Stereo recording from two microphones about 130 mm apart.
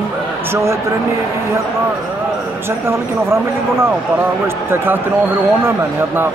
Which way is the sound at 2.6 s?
20° right (ahead or behind).